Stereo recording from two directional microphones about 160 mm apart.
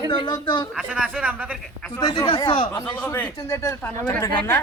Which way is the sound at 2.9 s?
15° left (ahead or behind).